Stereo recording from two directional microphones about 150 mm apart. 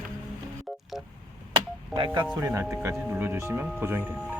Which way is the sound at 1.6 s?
30° right (ahead or behind).